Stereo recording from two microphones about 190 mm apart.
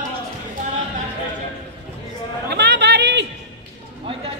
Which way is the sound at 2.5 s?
65° right (ahead or behind).